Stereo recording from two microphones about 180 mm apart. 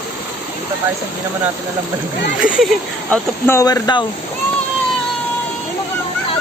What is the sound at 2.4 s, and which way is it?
Speech, 5° right (ahead or behind).